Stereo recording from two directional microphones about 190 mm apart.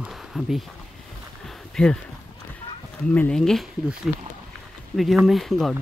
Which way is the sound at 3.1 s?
5° left (ahead or behind).